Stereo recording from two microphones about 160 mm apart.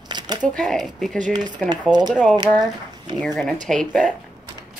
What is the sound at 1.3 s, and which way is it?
Speech, 25° right (ahead or behind).